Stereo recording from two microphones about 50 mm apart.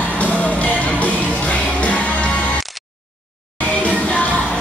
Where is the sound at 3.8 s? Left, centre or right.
Left.